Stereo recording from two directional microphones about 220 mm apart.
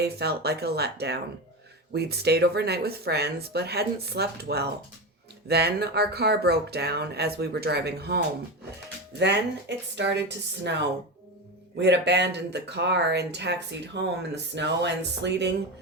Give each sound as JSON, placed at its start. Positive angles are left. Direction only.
{"t": 0.0, "sound": "speech", "side_deg": -45}